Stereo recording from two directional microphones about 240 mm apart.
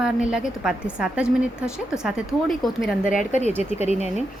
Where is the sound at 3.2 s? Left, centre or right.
Left.